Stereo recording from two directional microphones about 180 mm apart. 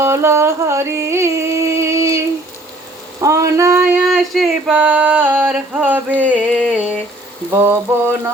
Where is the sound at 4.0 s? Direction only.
Centre (ahead or behind).